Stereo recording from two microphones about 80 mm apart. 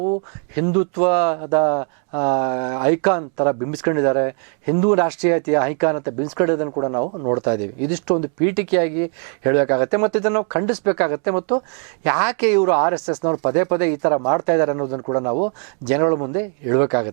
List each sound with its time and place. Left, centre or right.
0.0 s speech: right